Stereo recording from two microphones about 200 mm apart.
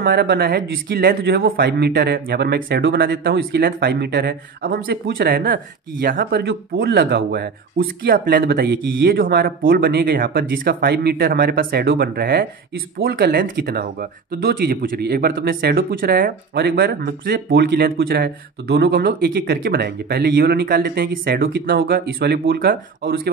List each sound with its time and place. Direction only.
0.0 s speech: 50° right (ahead or behind)